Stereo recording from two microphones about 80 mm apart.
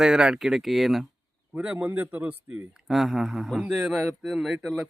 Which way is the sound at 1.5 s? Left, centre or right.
Centre.